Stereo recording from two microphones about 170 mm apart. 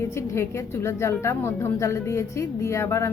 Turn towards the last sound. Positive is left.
turn(degrees=15)  # may be behind; listen again after turning